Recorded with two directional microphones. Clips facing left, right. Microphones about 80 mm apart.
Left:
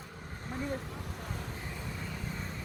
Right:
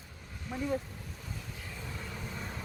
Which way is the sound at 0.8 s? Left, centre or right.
Left.